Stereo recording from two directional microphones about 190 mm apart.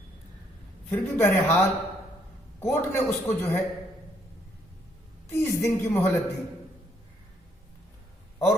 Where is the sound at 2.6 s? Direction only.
15° left (ahead or behind).